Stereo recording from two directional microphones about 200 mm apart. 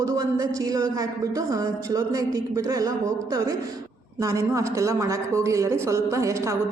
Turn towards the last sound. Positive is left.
turn(degrees=-15)  # may be behind; listen again after turning